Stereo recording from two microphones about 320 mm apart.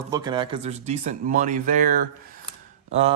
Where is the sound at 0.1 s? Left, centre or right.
Centre.